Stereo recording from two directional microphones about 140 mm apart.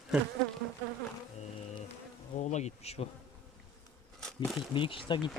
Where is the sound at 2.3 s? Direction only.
55° left (ahead or behind).